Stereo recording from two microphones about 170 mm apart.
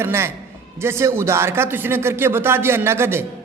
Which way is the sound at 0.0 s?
15° right (ahead or behind).